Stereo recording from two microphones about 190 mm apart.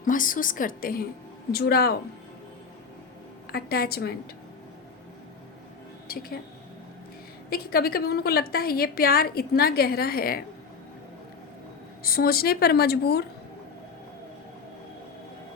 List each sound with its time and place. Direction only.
0.0 s a woman's voice: 45° left (ahead or behind)
3.5 s a woman's voice: 55° left (ahead or behind)
6.1 s a woman's voice: 55° left (ahead or behind)
7.5 s a woman's voice: 55° left (ahead or behind)
12.0 s a woman's voice: 50° left (ahead or behind)